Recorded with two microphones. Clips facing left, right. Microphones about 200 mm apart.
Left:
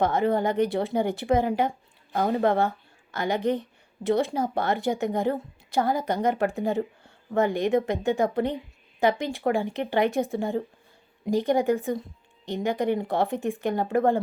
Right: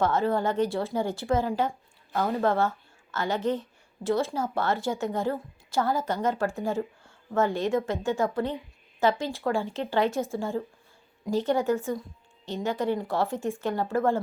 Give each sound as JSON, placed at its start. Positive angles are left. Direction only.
{"t": 0.0, "sound": "a woman's voice", "side_deg": 15}